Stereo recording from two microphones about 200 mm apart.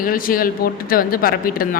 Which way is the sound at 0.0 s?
45° left (ahead or behind).